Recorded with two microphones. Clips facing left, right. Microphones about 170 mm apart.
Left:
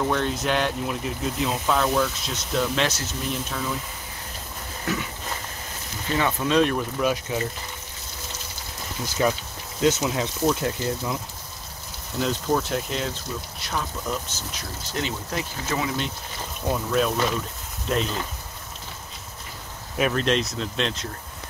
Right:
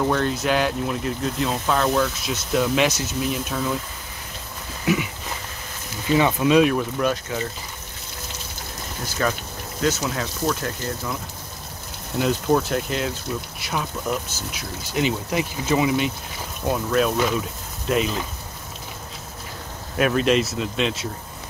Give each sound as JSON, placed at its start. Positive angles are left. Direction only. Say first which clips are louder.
{"t": 0.1, "sound": "speech", "louder": "right 3 dB", "side_deg": 0}
{"t": 6.1, "sound": "speech", "louder": "right 4 dB", "side_deg": -15}
{"t": 9.2, "sound": "speech", "louder": "left 1 dB", "side_deg": 15}
{"t": 12.2, "sound": "speech", "louder": "right 4 dB", "side_deg": -5}
{"t": 16.7, "sound": "speech", "louder": "right 3 dB", "side_deg": 0}
{"t": 20.0, "sound": "speech", "louder": "right 4 dB", "side_deg": -5}